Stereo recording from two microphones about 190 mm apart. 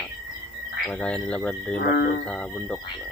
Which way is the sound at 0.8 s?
5° left (ahead or behind).